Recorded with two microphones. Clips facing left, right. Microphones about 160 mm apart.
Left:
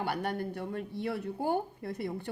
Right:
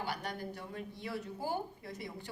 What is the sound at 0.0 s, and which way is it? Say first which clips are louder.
Speech: left 7 dB; 55° left (ahead or behind).